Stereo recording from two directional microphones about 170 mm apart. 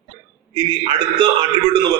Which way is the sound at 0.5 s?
30° right (ahead or behind).